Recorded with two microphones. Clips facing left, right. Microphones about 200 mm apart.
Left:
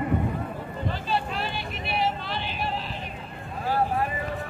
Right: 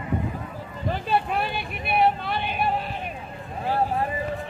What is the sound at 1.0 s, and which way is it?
Vehicle, 55° right (ahead or behind).